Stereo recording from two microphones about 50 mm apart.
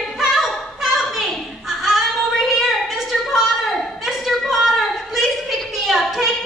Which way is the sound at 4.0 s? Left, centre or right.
Centre.